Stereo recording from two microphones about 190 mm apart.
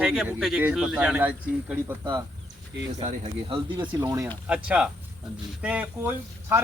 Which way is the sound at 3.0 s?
35° right (ahead or behind).